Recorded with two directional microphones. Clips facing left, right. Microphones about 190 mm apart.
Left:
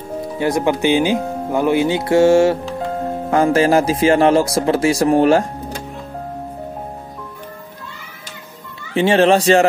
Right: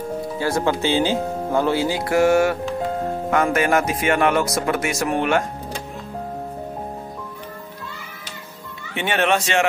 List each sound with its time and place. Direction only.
0.4 s speech: 20° left (ahead or behind); by 5.4 s 35° left (ahead or behind)
8.9 s speech: 30° left (ahead or behind)